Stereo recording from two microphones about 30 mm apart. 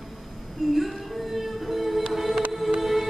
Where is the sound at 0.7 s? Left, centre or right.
Centre.